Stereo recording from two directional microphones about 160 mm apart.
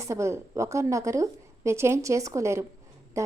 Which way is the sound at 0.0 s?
15° right (ahead or behind).